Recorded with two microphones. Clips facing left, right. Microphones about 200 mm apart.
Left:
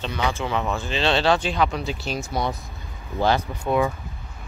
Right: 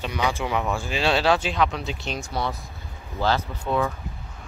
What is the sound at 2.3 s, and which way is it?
Speech, 15° left (ahead or behind).